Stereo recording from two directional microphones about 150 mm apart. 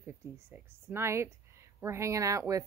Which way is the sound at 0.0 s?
15° right (ahead or behind).